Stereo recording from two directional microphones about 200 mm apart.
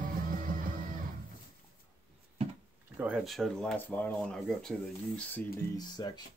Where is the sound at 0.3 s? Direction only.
45° right (ahead or behind).